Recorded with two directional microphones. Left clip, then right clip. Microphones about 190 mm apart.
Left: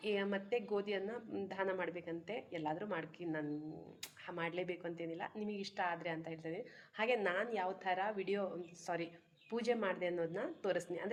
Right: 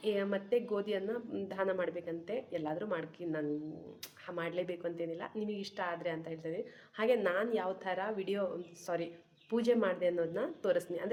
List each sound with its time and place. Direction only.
0.0 s a woman's voice: 20° right (ahead or behind)
9.5 s a woman's voice: 25° right (ahead or behind)